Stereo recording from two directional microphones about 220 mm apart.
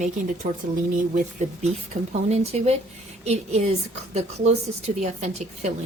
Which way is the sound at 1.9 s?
25° right (ahead or behind).